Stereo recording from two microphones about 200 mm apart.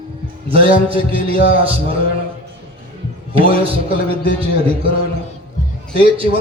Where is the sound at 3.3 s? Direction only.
25° right (ahead or behind).